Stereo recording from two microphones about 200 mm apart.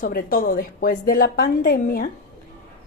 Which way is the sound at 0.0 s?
45° left (ahead or behind).